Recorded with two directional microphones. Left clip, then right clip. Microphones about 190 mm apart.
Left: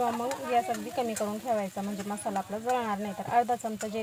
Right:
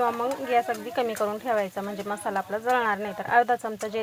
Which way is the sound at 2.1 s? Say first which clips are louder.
Right 4 dB; 25° right (ahead or behind).